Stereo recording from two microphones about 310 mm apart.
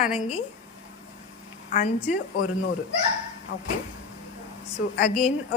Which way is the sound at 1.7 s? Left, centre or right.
Left.